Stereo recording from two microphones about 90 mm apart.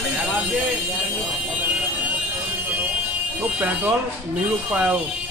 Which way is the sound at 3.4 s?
15° right (ahead or behind).